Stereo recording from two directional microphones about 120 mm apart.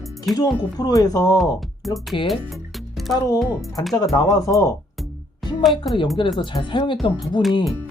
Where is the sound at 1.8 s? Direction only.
Centre (ahead or behind).